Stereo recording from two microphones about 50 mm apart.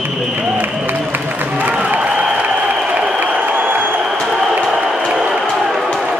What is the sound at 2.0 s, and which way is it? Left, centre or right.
Applause, right.